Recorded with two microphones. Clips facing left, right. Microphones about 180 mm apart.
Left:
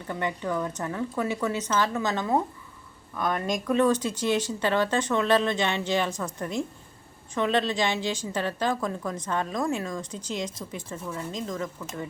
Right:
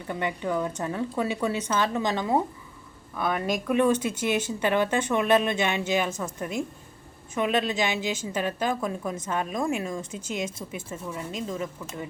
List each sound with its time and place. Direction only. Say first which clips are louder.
0.1 s speech: right 1 dB; 15° right (ahead or behind)